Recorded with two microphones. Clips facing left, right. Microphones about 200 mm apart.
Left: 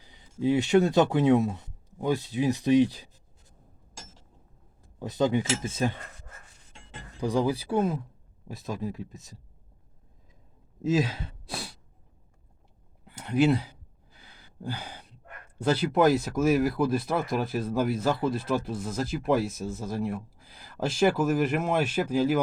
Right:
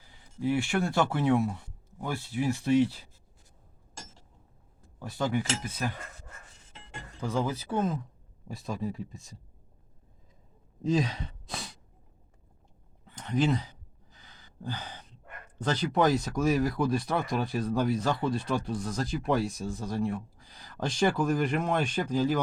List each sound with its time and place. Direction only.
0.0 s speech: 20° left (ahead or behind)
4.9 s speech: 20° left (ahead or behind)
7.2 s speech: 15° left (ahead or behind)
10.8 s sigh: 5° left (ahead or behind)
13.1 s speech: 10° left (ahead or behind)